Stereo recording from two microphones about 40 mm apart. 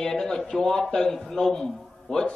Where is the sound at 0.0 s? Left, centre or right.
Centre.